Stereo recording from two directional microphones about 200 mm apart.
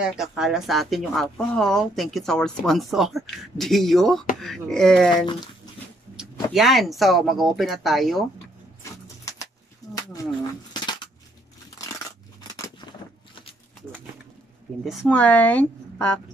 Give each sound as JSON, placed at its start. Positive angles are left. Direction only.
{"t": 0.0, "sound": "speech", "side_deg": -5}
{"t": 5.1, "sound": "speech", "side_deg": 25}
{"t": 6.1, "sound": "a sound", "side_deg": 0}
{"t": 7.0, "sound": "speech", "side_deg": 0}
{"t": 9.0, "sound": "pigeon", "side_deg": 15}
{"t": 11.8, "sound": "crunch", "side_deg": 15}
{"t": 14.9, "sound": "speech", "side_deg": 5}